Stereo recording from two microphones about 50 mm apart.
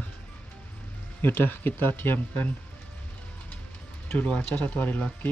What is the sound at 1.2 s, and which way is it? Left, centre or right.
Speech, left.